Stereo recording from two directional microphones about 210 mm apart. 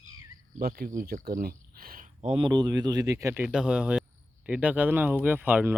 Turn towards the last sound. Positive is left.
turn(degrees=-10)  # may be behind; listen again after turning